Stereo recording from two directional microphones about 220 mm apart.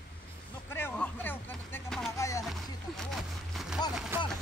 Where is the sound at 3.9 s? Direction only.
Centre (ahead or behind).